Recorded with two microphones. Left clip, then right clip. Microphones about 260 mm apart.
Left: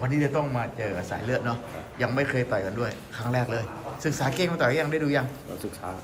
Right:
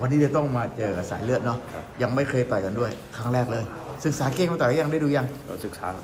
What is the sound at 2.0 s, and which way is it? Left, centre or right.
A man's voice, centre.